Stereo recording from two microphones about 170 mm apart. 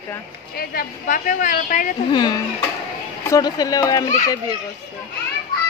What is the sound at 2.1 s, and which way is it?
Speech, 25° left (ahead or behind).